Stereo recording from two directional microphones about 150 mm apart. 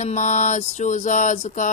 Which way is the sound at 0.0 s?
55° left (ahead or behind).